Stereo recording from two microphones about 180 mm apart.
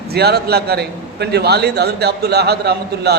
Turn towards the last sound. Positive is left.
turn(degrees=-65)  # may be behind; listen again after turning